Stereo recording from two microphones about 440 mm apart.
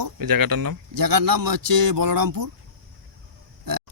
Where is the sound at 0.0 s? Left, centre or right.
Right.